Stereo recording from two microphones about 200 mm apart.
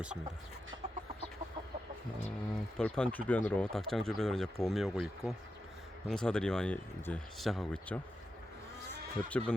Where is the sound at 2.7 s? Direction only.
5° left (ahead or behind).